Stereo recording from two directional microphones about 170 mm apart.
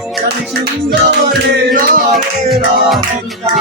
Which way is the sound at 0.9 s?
80° right.